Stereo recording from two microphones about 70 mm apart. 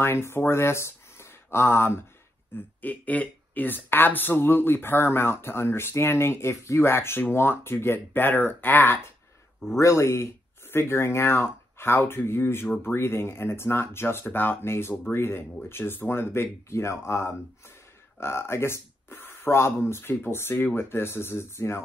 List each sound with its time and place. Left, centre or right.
0.0 s speech: left
2.5 s speech: left
9.8 s speech: left